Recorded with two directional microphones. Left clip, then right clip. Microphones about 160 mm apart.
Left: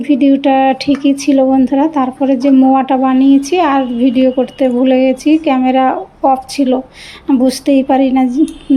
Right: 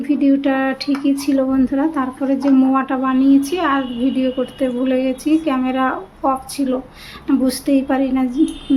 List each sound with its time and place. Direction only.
0.1 s speech: 30° left (ahead or behind)